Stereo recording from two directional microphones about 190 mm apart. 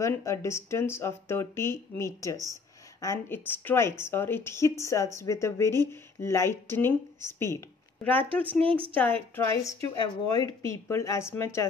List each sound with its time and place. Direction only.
0.0 s a woman's voice: 15° left (ahead or behind)
8.6 s a woman's voice: 30° right (ahead or behind)
8.9 s a woman's voice: 10° left (ahead or behind)